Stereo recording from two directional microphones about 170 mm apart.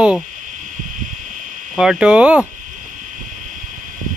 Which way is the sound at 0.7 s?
50° right (ahead or behind).